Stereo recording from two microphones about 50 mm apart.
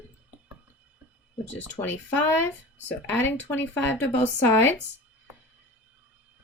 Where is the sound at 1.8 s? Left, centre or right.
Left.